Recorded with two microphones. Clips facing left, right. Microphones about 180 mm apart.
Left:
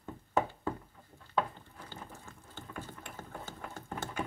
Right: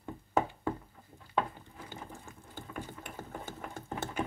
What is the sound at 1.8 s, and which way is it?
Ratchet, 15° right (ahead or behind).